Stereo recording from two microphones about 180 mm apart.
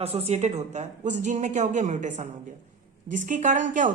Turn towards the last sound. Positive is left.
turn(degrees=-45)  # may be behind; listen again after turning